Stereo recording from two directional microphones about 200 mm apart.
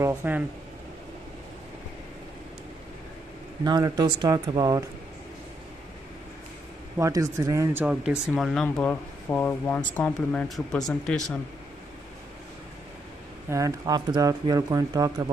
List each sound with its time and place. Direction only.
0.0 s speech: 10° right (ahead or behind)
3.6 s speech: 20° right (ahead or behind)
7.0 s speech: 15° right (ahead or behind); by 11.1 s 5° left (ahead or behind)
13.5 s speech: 15° right (ahead or behind)